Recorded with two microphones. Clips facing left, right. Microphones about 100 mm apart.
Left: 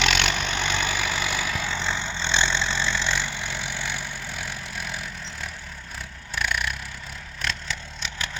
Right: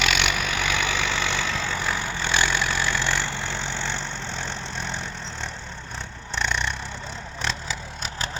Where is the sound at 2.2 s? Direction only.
25° left (ahead or behind).